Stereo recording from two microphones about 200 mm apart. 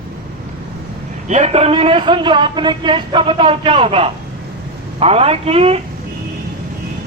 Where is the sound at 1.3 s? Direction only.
35° right (ahead or behind).